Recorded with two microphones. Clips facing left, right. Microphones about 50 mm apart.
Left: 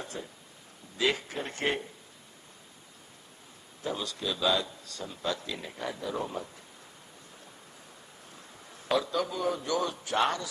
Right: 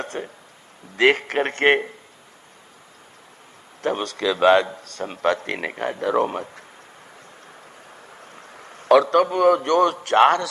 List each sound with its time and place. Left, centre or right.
0.0 s a man's voice: right
3.8 s a man's voice: right
8.5 s a sound: right
9.2 s a man's voice: right